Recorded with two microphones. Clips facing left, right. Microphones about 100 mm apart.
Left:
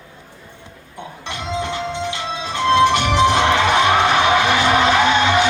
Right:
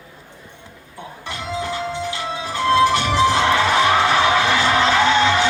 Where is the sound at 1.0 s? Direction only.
20° left (ahead or behind).